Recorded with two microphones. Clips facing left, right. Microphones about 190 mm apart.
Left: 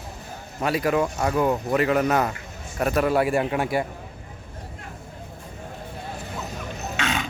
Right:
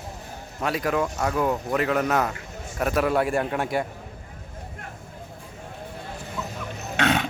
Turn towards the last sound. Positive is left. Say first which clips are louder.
# right 4 dB
turn(degrees=-60)  # may be behind; listen again after turning